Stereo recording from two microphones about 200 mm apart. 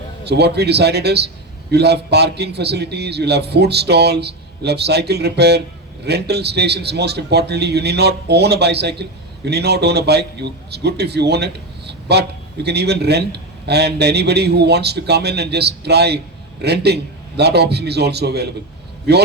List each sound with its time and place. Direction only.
0.3 s a man's voice: 55° right (ahead or behind)